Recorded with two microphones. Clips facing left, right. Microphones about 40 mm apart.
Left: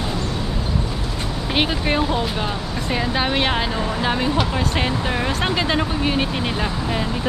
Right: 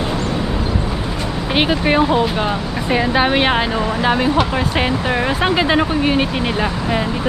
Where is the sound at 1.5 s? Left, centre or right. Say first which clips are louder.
Right 5 dB; centre.